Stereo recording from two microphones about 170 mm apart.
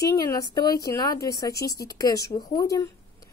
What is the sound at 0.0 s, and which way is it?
Speech, 20° left (ahead or behind).